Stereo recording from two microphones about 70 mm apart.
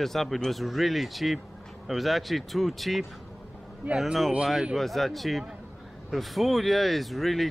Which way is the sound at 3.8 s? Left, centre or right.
Right.